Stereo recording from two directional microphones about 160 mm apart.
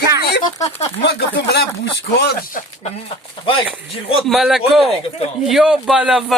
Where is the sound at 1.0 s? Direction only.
90° left.